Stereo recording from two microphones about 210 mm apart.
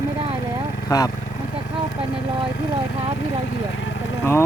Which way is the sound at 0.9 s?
20° left (ahead or behind).